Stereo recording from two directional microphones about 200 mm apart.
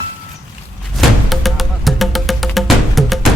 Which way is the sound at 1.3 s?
Centre (ahead or behind).